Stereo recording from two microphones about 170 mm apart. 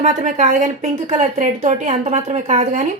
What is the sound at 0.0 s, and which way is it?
A woman's voice, 45° right (ahead or behind).